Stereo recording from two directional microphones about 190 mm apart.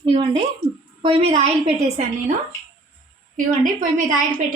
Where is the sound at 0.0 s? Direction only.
30° right (ahead or behind).